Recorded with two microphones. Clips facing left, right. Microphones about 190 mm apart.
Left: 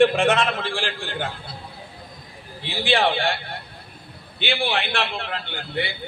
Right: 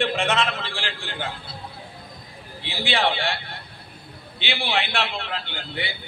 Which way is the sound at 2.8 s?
50° left (ahead or behind).